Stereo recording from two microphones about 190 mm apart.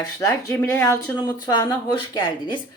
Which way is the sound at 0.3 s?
10° left (ahead or behind).